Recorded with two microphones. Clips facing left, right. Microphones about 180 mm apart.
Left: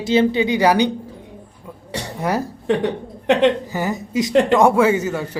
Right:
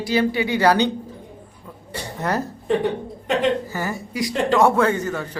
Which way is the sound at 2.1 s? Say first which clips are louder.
Left 2 dB; 10° left (ahead or behind).